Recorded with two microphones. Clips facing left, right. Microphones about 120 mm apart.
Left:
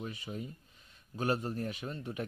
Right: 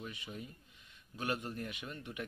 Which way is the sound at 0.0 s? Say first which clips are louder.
Left 5 dB; 40° left (ahead or behind).